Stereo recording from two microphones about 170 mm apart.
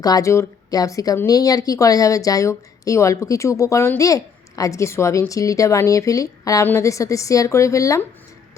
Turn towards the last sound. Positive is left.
turn(degrees=20)  # may be behind; listen again after turning